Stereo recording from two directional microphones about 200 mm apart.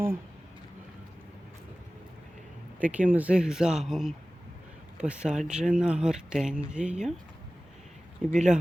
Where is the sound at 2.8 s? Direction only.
5° right (ahead or behind).